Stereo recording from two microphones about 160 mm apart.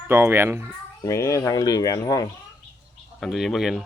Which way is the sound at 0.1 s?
15° right (ahead or behind).